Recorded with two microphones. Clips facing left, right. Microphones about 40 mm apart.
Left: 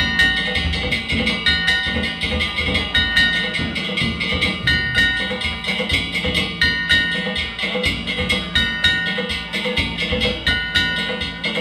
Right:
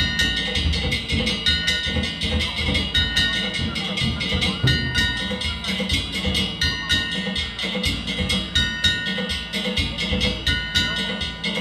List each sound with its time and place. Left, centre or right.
0.0 s music: left